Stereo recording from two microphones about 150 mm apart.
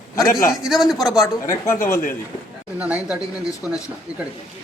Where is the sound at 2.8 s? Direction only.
10° right (ahead or behind).